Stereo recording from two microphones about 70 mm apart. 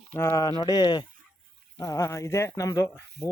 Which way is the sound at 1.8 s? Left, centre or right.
Left.